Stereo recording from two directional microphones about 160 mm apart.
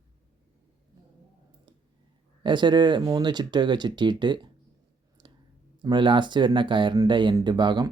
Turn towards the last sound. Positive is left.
turn(degrees=-30)  # may be behind; listen again after turning